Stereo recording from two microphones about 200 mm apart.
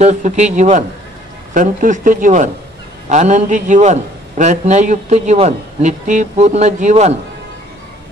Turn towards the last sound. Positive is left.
turn(degrees=-35)  # may be behind; listen again after turning